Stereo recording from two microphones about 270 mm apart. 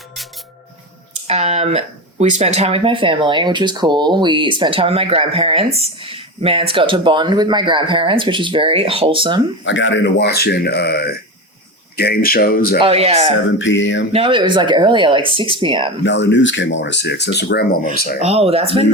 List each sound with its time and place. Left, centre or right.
1.3 s speech: right
9.6 s speech: left
12.8 s speech: right
13.6 s a sound: left
14.1 s speech: centre
16.0 s speech: left
18.2 s speech: right